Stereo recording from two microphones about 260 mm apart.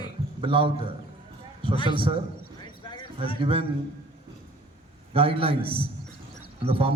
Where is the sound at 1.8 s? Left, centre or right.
Centre.